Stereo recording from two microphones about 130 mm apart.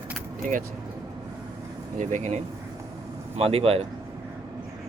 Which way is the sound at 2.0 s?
70° right (ahead or behind).